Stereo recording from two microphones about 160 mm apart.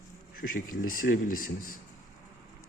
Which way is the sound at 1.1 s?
70° left (ahead or behind).